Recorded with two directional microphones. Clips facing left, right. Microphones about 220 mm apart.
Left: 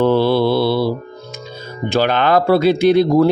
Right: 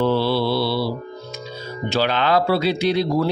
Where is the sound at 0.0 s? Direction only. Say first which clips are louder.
Left 5 dB; 50° left (ahead or behind).